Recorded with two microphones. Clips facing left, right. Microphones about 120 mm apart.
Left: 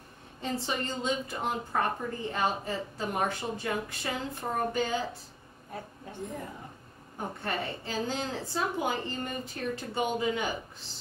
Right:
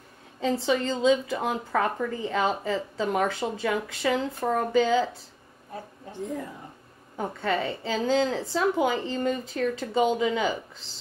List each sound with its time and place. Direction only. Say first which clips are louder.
0.4 s a woman's voice: right 8 dB; 90° right
7.2 s a woman's voice: right 6 dB; 90° right